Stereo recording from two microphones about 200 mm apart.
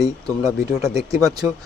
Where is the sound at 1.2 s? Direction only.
20° right (ahead or behind).